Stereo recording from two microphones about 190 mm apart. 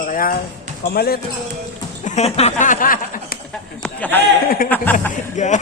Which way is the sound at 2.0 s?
35° left (ahead or behind).